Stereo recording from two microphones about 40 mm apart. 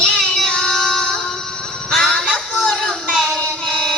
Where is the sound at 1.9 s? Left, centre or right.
Centre.